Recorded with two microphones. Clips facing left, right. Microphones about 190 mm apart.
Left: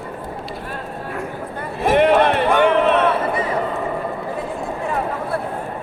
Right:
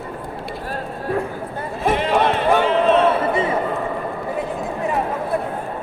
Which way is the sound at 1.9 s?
60° left (ahead or behind).